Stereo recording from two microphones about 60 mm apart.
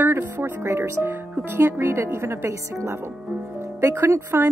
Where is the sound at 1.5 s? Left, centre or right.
Right.